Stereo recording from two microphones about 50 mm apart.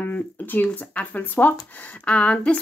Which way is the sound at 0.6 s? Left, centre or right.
Left.